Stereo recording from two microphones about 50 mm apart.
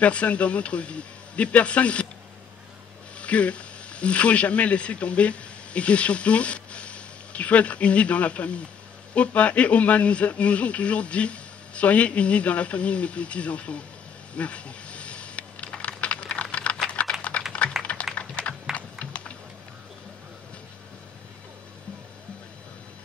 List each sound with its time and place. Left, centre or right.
0.0 s a man's voice: left
3.2 s a man's voice: left
14.3 s a sound: left
16.5 s typing: left
17.1 s typing: centre
17.5 s typing: left